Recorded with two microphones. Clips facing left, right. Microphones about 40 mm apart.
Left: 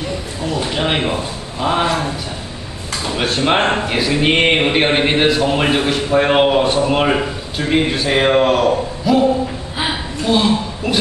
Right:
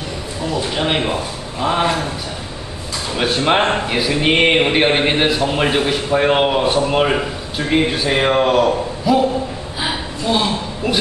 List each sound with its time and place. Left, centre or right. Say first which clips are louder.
0.7 s a man's voice: even; centre
3.2 s a man's voice: even; centre
9.8 s a sound: left 1 dB; centre